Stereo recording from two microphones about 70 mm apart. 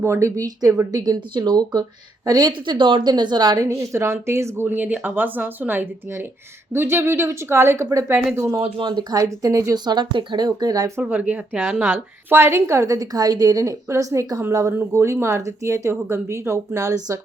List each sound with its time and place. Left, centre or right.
0.0 s a woman's voice: right
0.9 s a woman's voice: right
3.6 s speech: right
8.5 s a woman's voice: right
9.1 s a woman's voice: right
9.7 s a woman's voice: right
11.1 s a woman's voice: centre; by 17.2 s right